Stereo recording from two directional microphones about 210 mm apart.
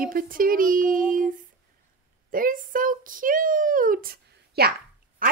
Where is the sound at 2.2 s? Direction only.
40° right (ahead or behind).